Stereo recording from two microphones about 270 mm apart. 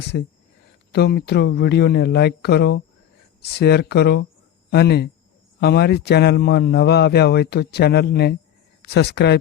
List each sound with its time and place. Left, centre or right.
0.9 s a man's voice: left